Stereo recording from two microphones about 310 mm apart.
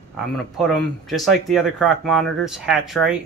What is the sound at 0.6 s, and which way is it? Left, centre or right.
Speech, centre.